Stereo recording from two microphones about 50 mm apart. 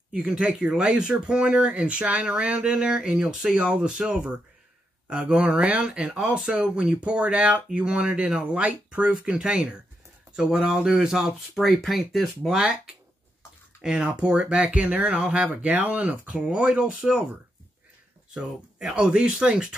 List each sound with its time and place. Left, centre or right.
0.6 s speech: centre
0.9 s speech: centre
13.7 s speech: centre
15.7 s speech: right
18.3 s speech: centre